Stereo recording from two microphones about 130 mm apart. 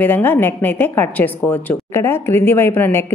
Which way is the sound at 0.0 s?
15° left (ahead or behind).